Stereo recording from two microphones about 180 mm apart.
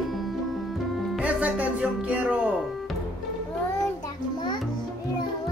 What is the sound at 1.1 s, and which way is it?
A woman's voice, 10° right (ahead or behind).